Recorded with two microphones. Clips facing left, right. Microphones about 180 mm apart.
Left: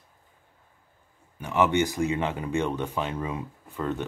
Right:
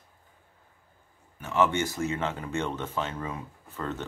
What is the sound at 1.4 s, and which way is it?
Speech, 15° left (ahead or behind).